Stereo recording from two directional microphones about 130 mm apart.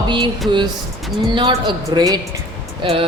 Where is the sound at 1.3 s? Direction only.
40° right (ahead or behind).